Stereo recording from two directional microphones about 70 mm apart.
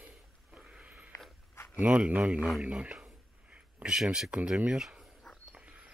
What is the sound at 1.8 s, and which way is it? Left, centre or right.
Speech, centre.